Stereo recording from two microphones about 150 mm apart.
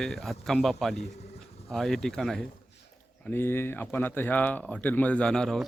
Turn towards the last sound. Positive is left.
turn(degrees=5)  # may be behind; listen again after turning